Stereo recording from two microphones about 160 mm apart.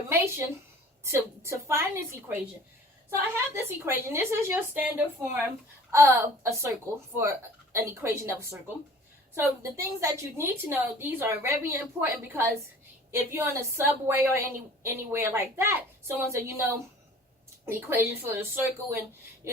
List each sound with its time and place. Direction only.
0.1 s a woman's voice: 15° right (ahead or behind)
3.5 s a woman's voice: 15° right (ahead or behind)